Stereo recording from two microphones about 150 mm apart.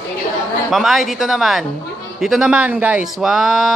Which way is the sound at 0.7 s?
Centre (ahead or behind).